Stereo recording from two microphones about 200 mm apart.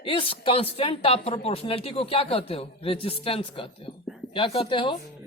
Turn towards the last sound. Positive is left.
turn(degrees=25)  # may be behind; listen again after turning